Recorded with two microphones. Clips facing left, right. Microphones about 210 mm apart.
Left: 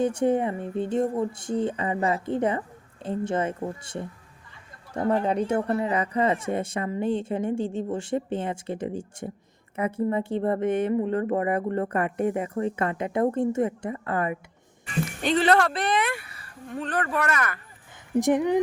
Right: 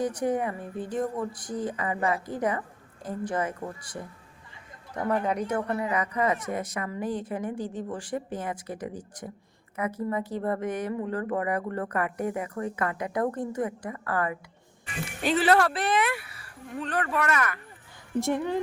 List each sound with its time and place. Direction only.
0.0 s speech: 25° left (ahead or behind)
15.2 s speech: 5° right (ahead or behind)
16.8 s speech: 45° left (ahead or behind)
18.2 s speech: 15° left (ahead or behind)